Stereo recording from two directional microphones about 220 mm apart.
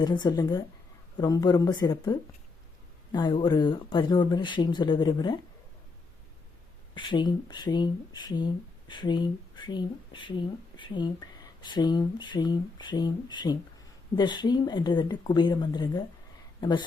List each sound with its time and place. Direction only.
0.0 s speech: 20° left (ahead or behind)
6.9 s speech: 20° left (ahead or behind)